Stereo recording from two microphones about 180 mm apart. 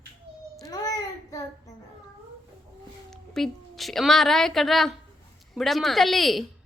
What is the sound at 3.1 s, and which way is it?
A woman's voice, centre (ahead or behind).